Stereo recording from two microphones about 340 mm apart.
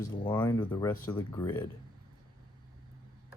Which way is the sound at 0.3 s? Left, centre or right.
Centre.